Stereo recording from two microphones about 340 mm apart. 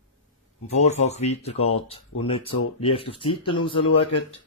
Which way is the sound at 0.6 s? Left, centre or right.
Centre.